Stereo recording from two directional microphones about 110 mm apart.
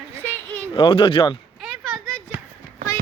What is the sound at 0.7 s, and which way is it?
Speech, 50° left (ahead or behind).